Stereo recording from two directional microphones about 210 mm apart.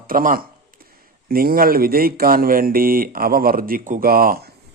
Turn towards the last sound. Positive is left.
turn(degrees=-45)  # may be behind; listen again after turning